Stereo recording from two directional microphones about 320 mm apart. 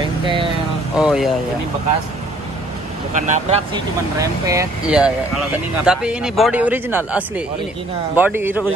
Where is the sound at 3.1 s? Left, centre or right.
Right; by 8.6 s centre.